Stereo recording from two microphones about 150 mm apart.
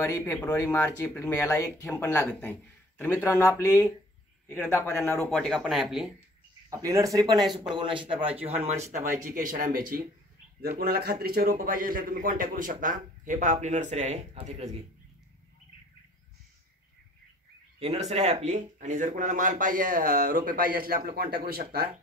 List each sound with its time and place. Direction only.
0.0 s a man's voice: 20° left (ahead or behind); by 6.1 s centre (ahead or behind)
6.7 s speech: 20° right (ahead or behind); by 8.5 s 40° right (ahead or behind)
9.2 s speech: 65° right (ahead or behind)
10.8 s speech: 90° right; by 14.8 s 45° right (ahead or behind)
17.7 s speech: 45° right (ahead or behind); by 21.9 s 90° right